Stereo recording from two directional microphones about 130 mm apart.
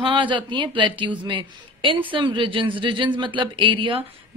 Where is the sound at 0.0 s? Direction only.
40° right (ahead or behind).